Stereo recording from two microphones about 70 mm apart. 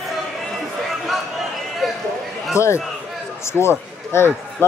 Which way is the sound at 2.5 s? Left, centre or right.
Left.